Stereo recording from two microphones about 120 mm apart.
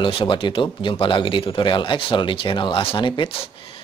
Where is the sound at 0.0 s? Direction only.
45° left (ahead or behind).